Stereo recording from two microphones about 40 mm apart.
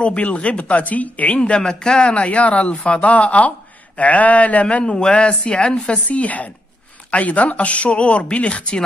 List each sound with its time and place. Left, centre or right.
0.0 s speech: left
1.4 s speech: left
6.0 s speech: left